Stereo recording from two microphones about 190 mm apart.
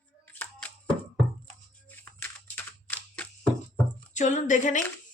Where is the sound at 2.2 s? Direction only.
10° left (ahead or behind).